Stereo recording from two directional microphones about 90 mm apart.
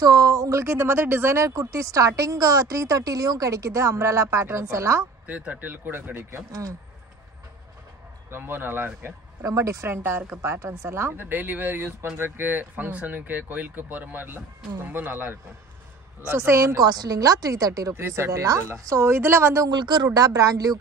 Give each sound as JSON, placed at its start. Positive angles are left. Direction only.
{"t": 0.0, "sound": "speech", "side_deg": -40}
{"t": 5.2, "sound": "a woman's voice", "side_deg": -15}
{"t": 8.3, "sound": "a woman's voice", "side_deg": -20}
{"t": 9.4, "sound": "speech", "side_deg": -35}
{"t": 9.8, "sound": "a woman's voice", "side_deg": -25}
{"t": 19.7, "sound": "speech", "side_deg": -50}